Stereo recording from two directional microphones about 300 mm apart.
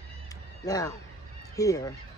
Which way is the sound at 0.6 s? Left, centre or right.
Centre.